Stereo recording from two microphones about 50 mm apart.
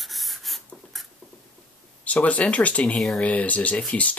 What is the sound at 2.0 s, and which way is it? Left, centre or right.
Speech, left.